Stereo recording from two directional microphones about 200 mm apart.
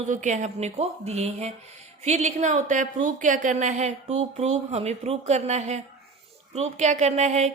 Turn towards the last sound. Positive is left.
turn(degrees=-35)  # may be behind; listen again after turning